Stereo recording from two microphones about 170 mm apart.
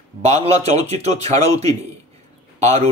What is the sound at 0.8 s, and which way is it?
Speech, 40° right (ahead or behind).